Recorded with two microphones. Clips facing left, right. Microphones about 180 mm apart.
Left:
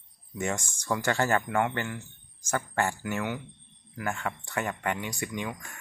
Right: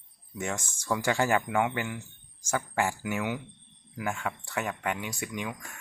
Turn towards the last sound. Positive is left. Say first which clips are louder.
# left 1 dB
turn(degrees=-5)  # may be behind; listen again after turning